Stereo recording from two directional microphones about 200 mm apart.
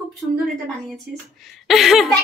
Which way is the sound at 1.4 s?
Centre (ahead or behind).